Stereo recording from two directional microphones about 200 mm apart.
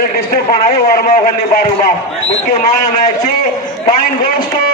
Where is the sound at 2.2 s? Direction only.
35° left (ahead or behind).